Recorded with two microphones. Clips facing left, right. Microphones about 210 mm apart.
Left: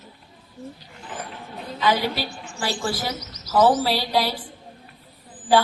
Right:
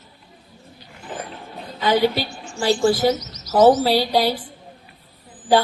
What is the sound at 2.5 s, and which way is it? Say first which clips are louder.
Speech: right 10 dB; 30° right (ahead or behind).